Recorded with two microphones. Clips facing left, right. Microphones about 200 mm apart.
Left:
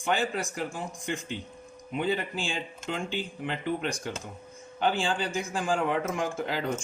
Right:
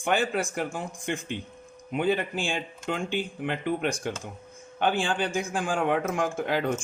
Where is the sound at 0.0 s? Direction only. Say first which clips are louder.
Right 3 dB; 55° right (ahead or behind).